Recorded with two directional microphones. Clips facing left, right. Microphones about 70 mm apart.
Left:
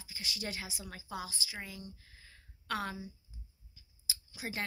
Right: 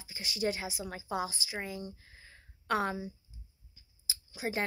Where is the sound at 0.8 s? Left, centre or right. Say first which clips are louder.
Right 9 dB; right.